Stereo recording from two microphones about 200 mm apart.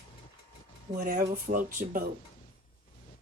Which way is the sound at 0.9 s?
40° right (ahead or behind).